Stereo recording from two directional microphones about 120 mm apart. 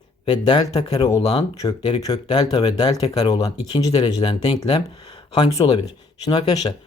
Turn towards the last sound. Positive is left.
turn(degrees=35)  # may be behind; listen again after turning